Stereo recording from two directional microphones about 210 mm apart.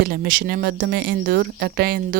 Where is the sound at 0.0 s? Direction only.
50° right (ahead or behind).